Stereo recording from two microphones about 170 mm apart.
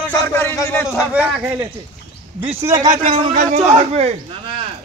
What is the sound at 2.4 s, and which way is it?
Speech, 40° right (ahead or behind).